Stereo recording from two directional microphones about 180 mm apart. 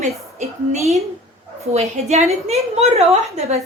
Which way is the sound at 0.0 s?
40° right (ahead or behind).